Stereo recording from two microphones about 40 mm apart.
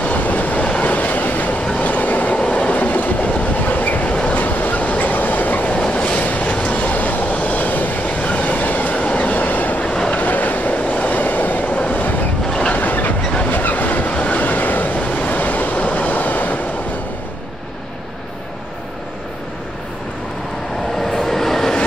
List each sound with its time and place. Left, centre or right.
0.1 s train: left
9.8 s vehicle: left
10.1 s train: left
21.0 s vehicle: centre